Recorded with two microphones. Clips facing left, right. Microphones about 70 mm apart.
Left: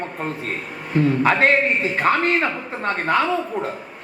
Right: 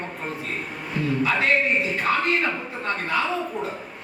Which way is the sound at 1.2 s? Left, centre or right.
Left.